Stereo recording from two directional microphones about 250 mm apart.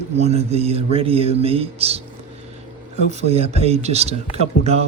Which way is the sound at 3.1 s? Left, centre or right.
Right.